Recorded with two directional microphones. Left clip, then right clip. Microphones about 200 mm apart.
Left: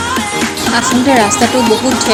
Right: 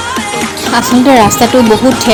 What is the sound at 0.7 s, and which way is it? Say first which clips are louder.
Music: right 4 dB; 35° right (ahead or behind).